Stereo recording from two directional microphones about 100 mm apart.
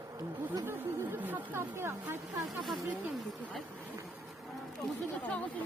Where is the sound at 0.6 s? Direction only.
25° right (ahead or behind).